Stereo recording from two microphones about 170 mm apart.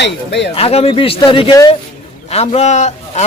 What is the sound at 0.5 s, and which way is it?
Speech, 35° left (ahead or behind).